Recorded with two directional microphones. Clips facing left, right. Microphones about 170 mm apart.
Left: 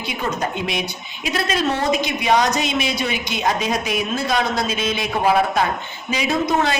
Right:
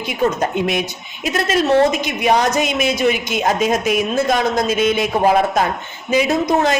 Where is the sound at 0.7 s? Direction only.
50° right (ahead or behind).